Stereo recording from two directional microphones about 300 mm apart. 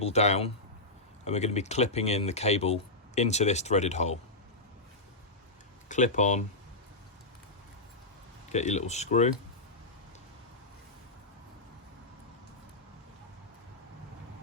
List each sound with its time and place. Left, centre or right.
0.0 s speech: left
5.9 s speech: left
8.5 s speech: left